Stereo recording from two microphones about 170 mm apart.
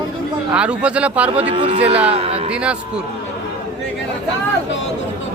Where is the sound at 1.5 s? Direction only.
30° right (ahead or behind).